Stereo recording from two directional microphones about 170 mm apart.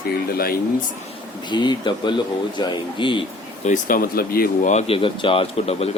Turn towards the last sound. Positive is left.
turn(degrees=35)  # may be behind; listen again after turning